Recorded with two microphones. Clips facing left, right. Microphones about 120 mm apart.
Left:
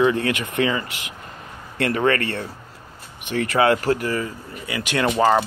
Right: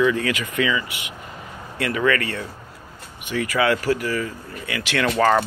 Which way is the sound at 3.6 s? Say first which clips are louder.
Left 2 dB; 40° left (ahead or behind).